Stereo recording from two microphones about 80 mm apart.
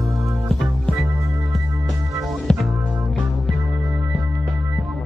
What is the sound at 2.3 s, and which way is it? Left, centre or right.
Music, centre.